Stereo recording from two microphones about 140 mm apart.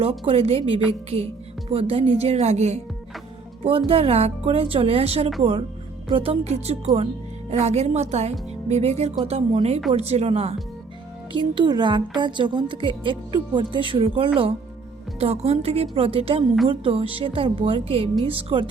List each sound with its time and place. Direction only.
0.0 s speech: 45° right (ahead or behind)
11.3 s a woman's voice: 35° right (ahead or behind)